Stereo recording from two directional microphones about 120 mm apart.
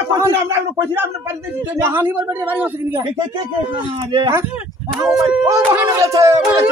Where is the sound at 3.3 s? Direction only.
40° right (ahead or behind).